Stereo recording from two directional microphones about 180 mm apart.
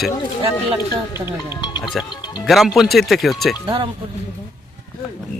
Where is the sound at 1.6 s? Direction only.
25° left (ahead or behind).